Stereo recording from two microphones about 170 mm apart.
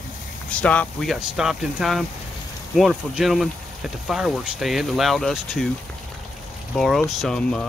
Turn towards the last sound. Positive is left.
turn(degrees=5)  # may be behind; listen again after turning